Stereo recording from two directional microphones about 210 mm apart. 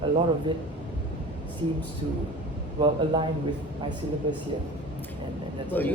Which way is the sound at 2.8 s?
20° right (ahead or behind).